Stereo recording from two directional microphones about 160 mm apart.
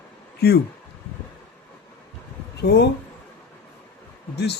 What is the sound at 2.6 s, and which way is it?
Speech, 90° left.